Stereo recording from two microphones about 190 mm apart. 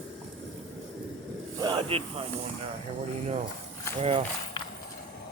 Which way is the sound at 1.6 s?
30° right (ahead or behind).